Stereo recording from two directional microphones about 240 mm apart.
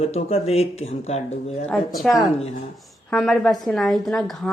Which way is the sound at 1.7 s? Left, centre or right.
Centre.